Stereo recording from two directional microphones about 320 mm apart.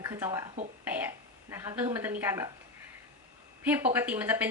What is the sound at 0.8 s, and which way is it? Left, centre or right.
Throat clearing, centre.